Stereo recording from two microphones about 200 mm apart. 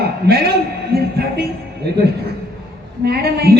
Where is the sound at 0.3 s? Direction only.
50° right (ahead or behind).